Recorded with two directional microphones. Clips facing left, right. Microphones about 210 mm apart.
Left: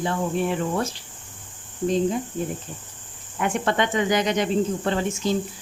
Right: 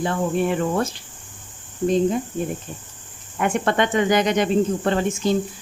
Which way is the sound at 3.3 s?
55° right (ahead or behind).